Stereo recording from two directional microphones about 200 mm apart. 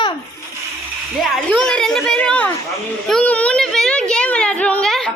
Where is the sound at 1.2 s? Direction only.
5° left (ahead or behind).